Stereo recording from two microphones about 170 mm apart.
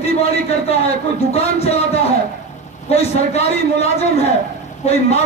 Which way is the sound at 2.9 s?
40° left (ahead or behind).